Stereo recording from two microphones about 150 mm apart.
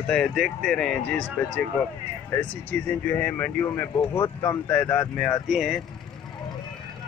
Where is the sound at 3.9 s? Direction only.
25° left (ahead or behind).